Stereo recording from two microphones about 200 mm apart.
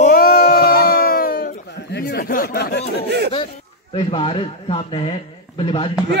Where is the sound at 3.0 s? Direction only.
55° right (ahead or behind).